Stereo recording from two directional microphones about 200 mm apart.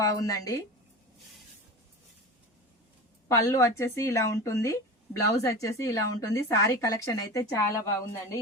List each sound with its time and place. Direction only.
0.0 s speech: 15° left (ahead or behind)
3.2 s speech: 15° left (ahead or behind)